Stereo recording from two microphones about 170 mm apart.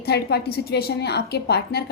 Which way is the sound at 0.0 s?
70° left (ahead or behind).